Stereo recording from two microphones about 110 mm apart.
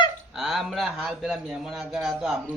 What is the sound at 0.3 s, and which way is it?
A man's voice, centre (ahead or behind).